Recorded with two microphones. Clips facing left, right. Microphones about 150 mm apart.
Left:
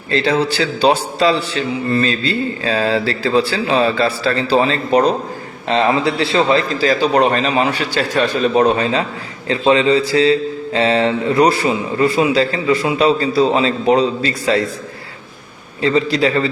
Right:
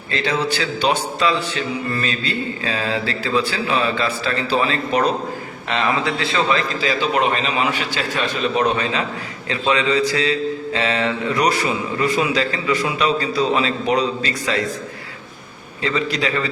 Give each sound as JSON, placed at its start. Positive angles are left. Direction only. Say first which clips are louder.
{"t": 0.1, "sound": "a man's voice", "louder": "left 5 dB", "side_deg": 35}
{"t": 15.8, "sound": "a man's voice", "louder": "left 7 dB", "side_deg": 35}